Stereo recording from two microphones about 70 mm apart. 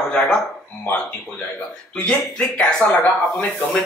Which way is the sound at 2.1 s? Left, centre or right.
Centre.